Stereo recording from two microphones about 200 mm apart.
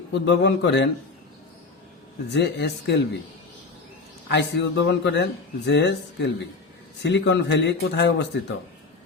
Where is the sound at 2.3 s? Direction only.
60° left (ahead or behind).